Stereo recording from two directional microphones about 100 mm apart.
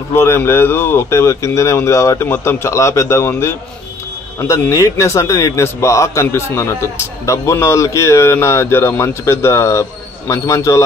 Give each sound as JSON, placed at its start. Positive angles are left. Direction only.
{"t": 0.1, "sound": "a man's voice", "side_deg": 25}